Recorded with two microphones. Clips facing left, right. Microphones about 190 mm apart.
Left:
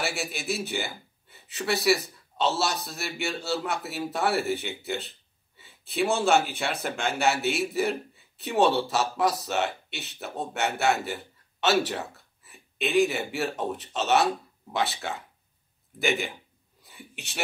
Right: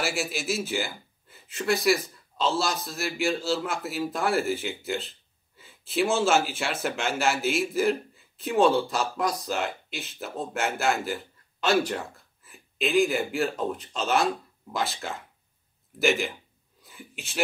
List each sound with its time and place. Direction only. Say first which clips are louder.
0.0 s a man's voice: right 2 dB; centre (ahead or behind)
5.6 s a sound: right 2 dB; centre (ahead or behind)
6.1 s a man's voice: left 2 dB; centre (ahead or behind)